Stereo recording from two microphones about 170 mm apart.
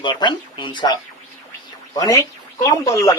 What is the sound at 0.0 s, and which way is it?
Speech, 25° left (ahead or behind).